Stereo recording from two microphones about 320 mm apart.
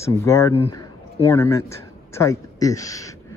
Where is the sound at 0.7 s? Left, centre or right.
Centre.